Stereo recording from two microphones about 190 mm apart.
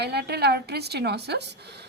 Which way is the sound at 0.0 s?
60° right (ahead or behind).